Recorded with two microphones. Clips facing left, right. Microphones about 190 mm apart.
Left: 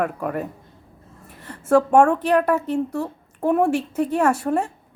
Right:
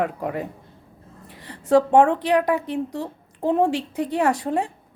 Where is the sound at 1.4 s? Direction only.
15° right (ahead or behind).